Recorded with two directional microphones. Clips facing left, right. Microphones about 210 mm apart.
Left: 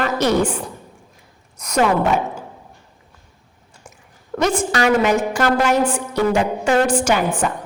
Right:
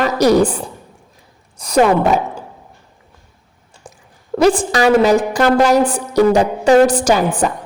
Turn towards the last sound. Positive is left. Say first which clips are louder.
# right 5 dB
turn(degrees=-40)  # may be behind; listen again after turning